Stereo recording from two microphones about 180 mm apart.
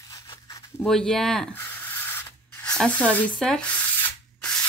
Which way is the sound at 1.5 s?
15° left (ahead or behind).